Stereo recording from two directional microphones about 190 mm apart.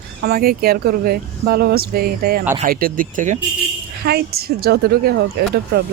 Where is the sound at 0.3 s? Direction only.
55° right (ahead or behind).